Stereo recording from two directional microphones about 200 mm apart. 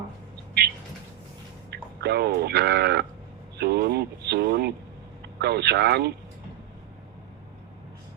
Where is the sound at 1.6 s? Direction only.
55° right (ahead or behind).